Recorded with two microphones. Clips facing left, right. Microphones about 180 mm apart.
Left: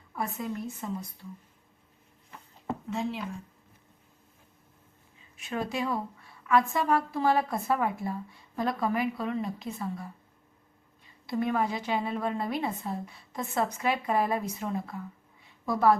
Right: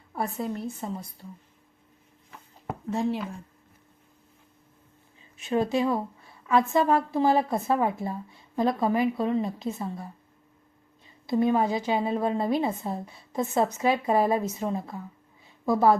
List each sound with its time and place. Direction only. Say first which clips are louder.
0.1 s a woman's voice: right 3 dB; 35° right (ahead or behind)
2.9 s speech: right 6 dB; 45° right (ahead or behind)
5.4 s a woman's voice: right 7 dB; 25° right (ahead or behind)
11.3 s a woman's voice: right 5 dB; 25° right (ahead or behind)